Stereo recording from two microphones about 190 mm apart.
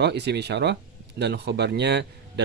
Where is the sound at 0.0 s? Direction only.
60° right (ahead or behind).